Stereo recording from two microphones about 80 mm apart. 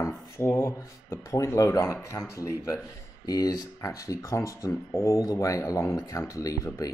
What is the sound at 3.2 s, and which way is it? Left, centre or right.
Speech, left.